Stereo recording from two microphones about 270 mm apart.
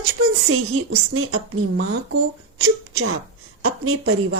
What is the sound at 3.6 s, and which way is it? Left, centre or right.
Speech, right.